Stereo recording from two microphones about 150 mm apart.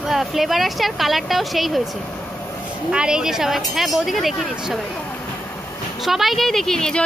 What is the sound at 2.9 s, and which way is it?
A woman's voice, 5° right (ahead or behind).